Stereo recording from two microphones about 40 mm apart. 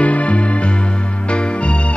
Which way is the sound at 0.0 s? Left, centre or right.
Left.